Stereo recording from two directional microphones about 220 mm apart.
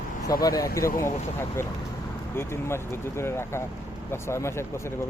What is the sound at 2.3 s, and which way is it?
Speech, 10° left (ahead or behind).